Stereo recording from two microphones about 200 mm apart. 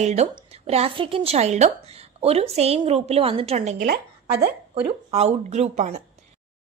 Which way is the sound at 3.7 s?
55° right (ahead or behind).